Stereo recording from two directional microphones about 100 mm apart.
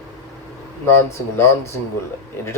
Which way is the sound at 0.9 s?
25° left (ahead or behind).